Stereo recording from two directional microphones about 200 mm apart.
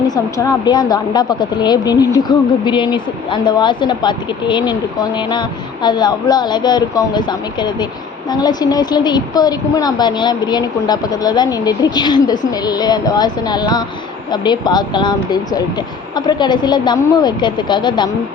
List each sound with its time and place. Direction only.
0.1 s speech: 20° left (ahead or behind)